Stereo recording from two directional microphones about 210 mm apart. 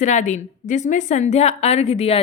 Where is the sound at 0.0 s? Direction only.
35° left (ahead or behind).